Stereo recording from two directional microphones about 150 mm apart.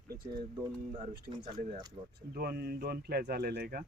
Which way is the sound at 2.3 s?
90° right.